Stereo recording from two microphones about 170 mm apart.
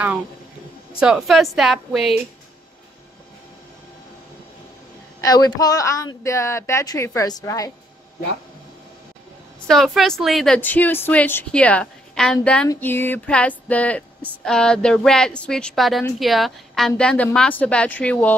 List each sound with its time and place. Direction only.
0.9 s a woman's voice: 5° right (ahead or behind)
5.2 s a woman's voice: 25° left (ahead or behind)
9.7 s a woman's voice: centre (ahead or behind)